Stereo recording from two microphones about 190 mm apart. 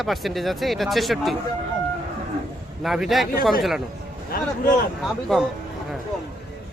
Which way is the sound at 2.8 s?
Centre (ahead or behind).